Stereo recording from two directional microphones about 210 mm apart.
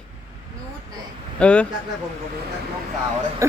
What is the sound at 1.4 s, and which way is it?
Speech, 5° left (ahead or behind).